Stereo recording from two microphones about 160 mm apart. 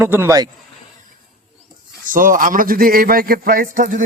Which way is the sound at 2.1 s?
55° right (ahead or behind).